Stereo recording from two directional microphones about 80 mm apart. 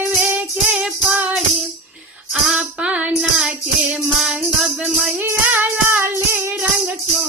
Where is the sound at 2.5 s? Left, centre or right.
Centre.